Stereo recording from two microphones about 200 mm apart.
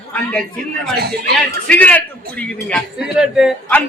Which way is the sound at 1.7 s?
5° left (ahead or behind).